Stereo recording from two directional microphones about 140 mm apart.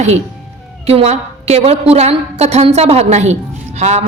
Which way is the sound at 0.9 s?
50° right (ahead or behind).